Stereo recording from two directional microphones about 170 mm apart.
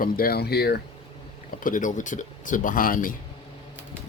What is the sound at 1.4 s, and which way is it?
Speech, 50° left (ahead or behind).